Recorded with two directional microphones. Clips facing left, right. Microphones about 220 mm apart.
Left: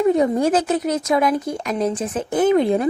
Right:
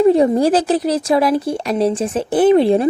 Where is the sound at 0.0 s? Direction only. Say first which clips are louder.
Right 4 dB; 30° right (ahead or behind).